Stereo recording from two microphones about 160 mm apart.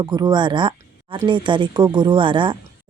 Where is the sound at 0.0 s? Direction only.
25° right (ahead or behind).